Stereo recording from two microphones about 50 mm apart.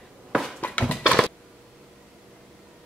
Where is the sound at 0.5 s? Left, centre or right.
Left.